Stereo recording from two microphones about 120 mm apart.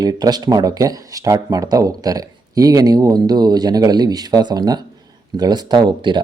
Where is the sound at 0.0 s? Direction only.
35° right (ahead or behind).